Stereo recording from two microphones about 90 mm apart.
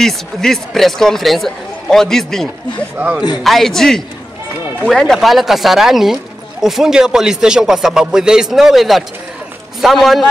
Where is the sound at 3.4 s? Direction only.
5° left (ahead or behind).